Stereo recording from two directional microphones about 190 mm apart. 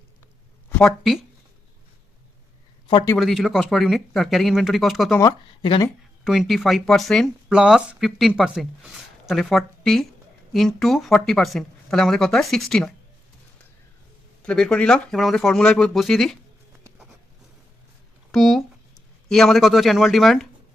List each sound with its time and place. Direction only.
0.7 s speech: 5° left (ahead or behind)
2.8 s a man's voice: 20° left (ahead or behind)
3.2 s speech: centre (ahead or behind)
5.2 s speech: 25° left (ahead or behind)
6.2 s speech: centre (ahead or behind)
14.4 s speech: 5° left (ahead or behind)
18.3 s speech: centre (ahead or behind)